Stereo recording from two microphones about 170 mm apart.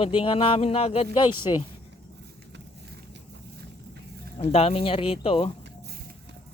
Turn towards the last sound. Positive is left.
turn(degrees=35)  # may be behind; listen again after turning